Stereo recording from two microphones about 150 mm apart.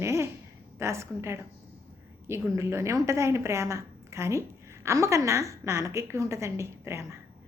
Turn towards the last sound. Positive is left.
turn(degrees=-15)  # may be behind; listen again after turning